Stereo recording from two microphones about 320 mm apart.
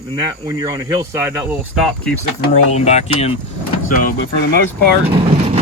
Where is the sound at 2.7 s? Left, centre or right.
Left.